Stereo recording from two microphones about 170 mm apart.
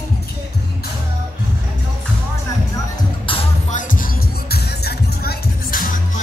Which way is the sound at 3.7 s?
50° left (ahead or behind).